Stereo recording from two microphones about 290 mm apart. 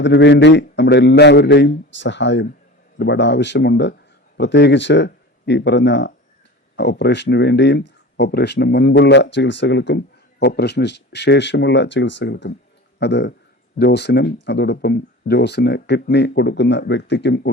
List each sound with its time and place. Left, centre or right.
0.0 s speech: left